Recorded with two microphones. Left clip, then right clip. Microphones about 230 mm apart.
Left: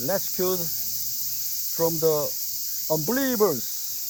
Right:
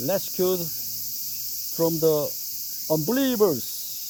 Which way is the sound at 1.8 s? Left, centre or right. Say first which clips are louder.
Right 1 dB; right.